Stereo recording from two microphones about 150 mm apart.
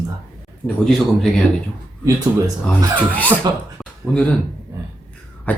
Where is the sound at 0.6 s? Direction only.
5° left (ahead or behind).